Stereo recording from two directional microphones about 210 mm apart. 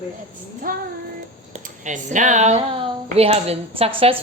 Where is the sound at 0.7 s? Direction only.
40° right (ahead or behind).